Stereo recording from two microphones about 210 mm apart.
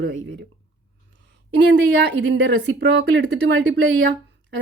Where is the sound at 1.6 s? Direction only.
55° right (ahead or behind).